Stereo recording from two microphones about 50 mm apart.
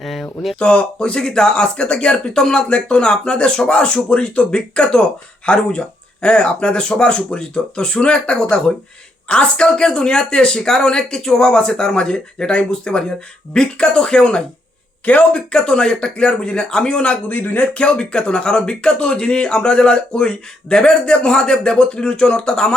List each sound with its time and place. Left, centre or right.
0.0 s a sound: centre
0.6 s speech: left
15.4 s speech: centre
17.2 s speech: left
17.7 s speech: left